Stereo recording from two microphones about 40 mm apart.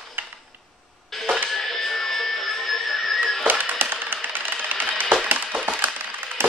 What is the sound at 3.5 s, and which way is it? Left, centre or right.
Music, right.